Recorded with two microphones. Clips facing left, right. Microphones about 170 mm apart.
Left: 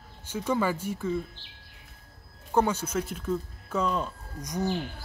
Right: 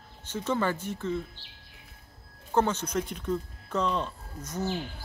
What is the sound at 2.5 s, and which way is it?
Speech, 10° left (ahead or behind).